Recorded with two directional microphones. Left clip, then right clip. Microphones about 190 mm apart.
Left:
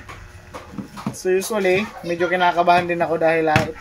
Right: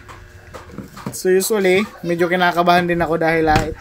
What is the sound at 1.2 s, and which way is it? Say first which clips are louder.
Speech: right 4 dB; 50° right (ahead or behind).